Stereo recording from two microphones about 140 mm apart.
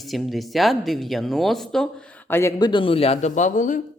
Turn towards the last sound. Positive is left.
turn(degrees=65)  # may be behind; listen again after turning